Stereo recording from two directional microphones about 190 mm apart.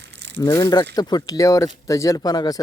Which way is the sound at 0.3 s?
20° left (ahead or behind).